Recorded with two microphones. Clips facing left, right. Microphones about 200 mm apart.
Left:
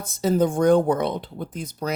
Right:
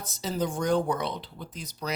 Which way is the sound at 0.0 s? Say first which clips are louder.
Left 9 dB; 50° left (ahead or behind).